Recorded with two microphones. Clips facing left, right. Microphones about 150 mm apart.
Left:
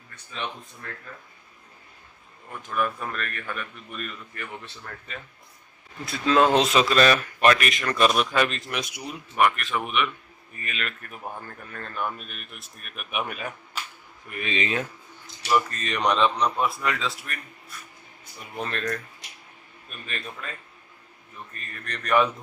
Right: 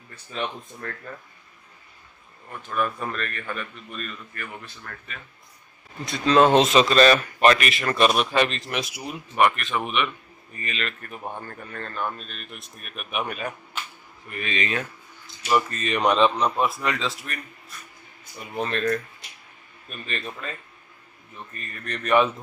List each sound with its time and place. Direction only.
3.1 s a man's voice: 5° left (ahead or behind)
4.6 s speech: 30° left (ahead or behind)
6.0 s a man's voice: centre (ahead or behind)
14.3 s speech: 20° left (ahead or behind)
15.5 s a man's voice: 5° right (ahead or behind)
21.5 s a man's voice: 5° right (ahead or behind)